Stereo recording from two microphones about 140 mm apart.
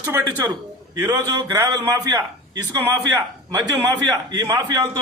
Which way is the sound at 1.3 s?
25° right (ahead or behind).